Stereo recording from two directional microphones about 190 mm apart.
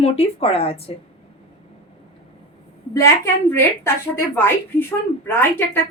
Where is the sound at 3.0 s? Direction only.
15° left (ahead or behind).